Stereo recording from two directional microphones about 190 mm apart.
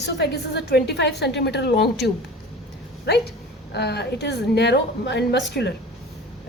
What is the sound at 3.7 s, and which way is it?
A woman's voice, 60° left (ahead or behind).